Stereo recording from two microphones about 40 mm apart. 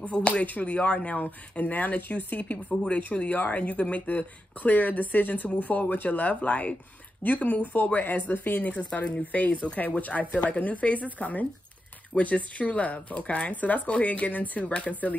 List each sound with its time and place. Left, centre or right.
0.0 s speech: left
1.6 s speech: left
4.1 s speech: left
8.5 s speech: left